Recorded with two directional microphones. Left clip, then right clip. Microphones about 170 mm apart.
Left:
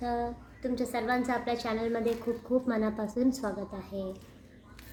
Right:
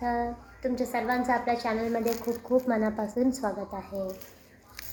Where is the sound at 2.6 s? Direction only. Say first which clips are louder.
Right 3 dB; 15° left (ahead or behind).